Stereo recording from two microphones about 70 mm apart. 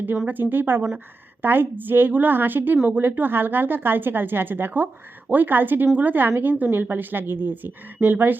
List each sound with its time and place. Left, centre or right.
0.3 s a woman's voice: right